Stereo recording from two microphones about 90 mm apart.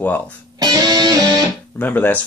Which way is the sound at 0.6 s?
45° right (ahead or behind).